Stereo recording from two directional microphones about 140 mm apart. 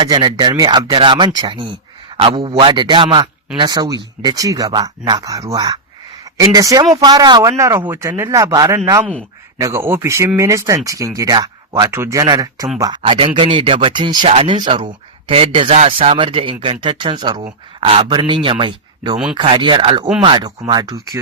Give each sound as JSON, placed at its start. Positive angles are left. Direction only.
{"t": 0.0, "sound": "speech", "side_deg": -30}
{"t": 13.0, "sound": "speech", "side_deg": -40}
{"t": 14.3, "sound": "speech", "side_deg": -45}
{"t": 14.5, "sound": "speech", "side_deg": -35}